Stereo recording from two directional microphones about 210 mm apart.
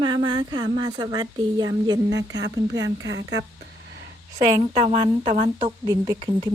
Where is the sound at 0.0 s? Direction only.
20° right (ahead or behind).